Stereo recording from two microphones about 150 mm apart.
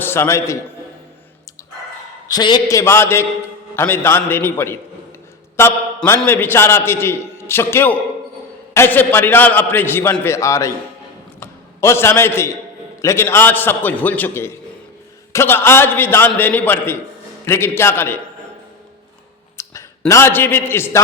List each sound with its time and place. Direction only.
0.0 s a man's voice: 15° left (ahead or behind)
2.3 s a man's voice: 30° left (ahead or behind)
6.1 s a man's voice: 10° left (ahead or behind)
11.3 s a sound: 15° left (ahead or behind)
13.0 s a man's voice: 20° left (ahead or behind)
19.6 s a sound: 20° left (ahead or behind)
20.1 s a man's voice: 15° left (ahead or behind)